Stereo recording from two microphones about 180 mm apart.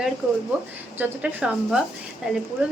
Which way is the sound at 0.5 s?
5° right (ahead or behind).